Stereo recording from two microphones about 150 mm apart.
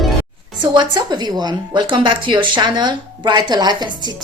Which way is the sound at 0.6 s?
30° right (ahead or behind).